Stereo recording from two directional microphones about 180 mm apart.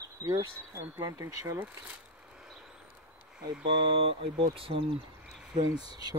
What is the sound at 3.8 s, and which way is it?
Speech, 30° right (ahead or behind).